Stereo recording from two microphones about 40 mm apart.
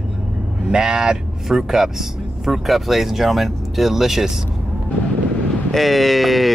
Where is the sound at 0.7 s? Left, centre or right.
Centre.